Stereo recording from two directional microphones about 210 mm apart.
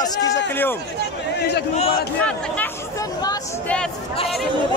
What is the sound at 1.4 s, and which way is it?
Speech, 50° left (ahead or behind).